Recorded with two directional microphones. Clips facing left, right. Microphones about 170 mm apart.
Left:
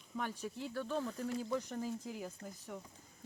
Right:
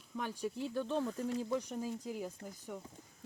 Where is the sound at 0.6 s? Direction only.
20° right (ahead or behind).